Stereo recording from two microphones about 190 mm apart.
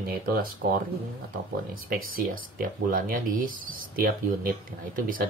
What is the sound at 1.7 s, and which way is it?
Speech, 50° right (ahead or behind).